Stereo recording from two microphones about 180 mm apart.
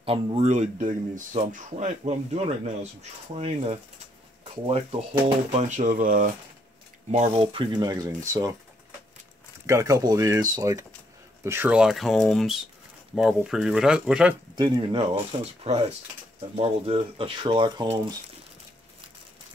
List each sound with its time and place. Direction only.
0.0 s speech: 30° right (ahead or behind)
5.5 s speech: 40° right (ahead or behind); by 8.5 s 15° right (ahead or behind)
9.7 s speech: 20° right (ahead or behind)
14.5 s speech: 25° right (ahead or behind)